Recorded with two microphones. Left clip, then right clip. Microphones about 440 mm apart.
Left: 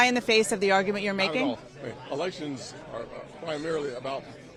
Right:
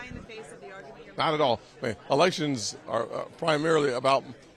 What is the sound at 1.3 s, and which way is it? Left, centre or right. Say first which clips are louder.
A man's voice: right 4 dB; right.